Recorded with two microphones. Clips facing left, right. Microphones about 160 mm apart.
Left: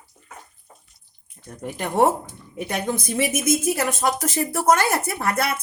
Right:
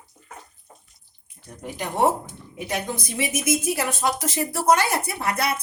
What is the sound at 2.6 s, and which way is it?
Speech, 50° left (ahead or behind).